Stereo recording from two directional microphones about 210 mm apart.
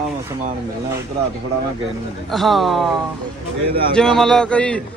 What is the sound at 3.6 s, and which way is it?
Speech, 45° right (ahead or behind).